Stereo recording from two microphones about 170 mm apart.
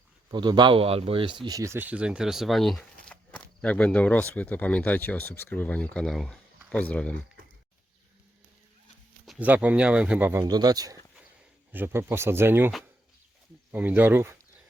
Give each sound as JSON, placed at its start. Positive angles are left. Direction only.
{"t": 0.3, "sound": "speech", "side_deg": -25}
{"t": 9.2, "sound": "speech", "side_deg": -5}
{"t": 10.4, "sound": "speech", "side_deg": -25}